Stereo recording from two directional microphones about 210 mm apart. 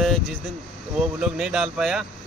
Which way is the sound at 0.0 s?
Centre (ahead or behind).